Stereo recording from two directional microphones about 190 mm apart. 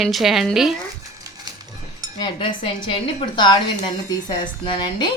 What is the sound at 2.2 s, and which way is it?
A woman's voice, 25° left (ahead or behind).